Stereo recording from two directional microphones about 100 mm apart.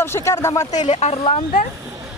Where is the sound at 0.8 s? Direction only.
90° left.